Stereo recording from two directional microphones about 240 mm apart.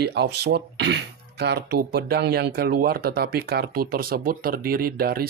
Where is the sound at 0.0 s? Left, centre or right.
Right.